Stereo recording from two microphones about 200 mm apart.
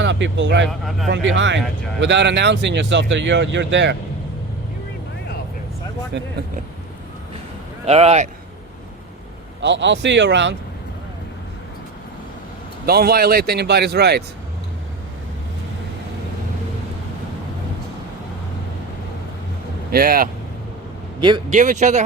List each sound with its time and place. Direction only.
0.0 s speech: 65° right (ahead or behind)
0.7 s speech: centre (ahead or behind)
1.1 s speech: 65° right (ahead or behind)
6.1 s speech: 60° right (ahead or behind)
7.9 s speech: 30° right (ahead or behind)
9.6 s speech: 65° right (ahead or behind)
12.8 s speech: 50° right (ahead or behind)
19.9 s speech: 45° right (ahead or behind)
21.2 s speech: 25° right (ahead or behind)
21.5 s speech: 35° right (ahead or behind)